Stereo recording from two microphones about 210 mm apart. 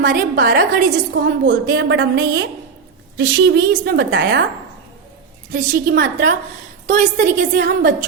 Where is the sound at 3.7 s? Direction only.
45° right (ahead or behind).